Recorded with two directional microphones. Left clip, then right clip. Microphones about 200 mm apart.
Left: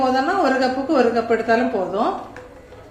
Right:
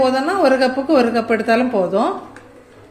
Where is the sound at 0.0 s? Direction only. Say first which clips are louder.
Right 3 dB; 50° right (ahead or behind).